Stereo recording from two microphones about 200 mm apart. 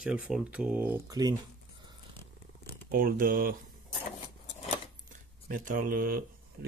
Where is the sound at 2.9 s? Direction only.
45° right (ahead or behind).